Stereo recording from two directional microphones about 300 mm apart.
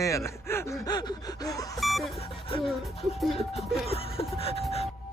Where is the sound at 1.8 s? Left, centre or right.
Centre.